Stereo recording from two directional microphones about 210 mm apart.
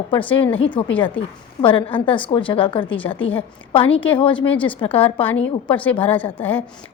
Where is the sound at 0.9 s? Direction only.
5° left (ahead or behind).